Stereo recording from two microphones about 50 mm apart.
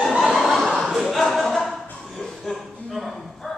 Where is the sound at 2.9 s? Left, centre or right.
Centre.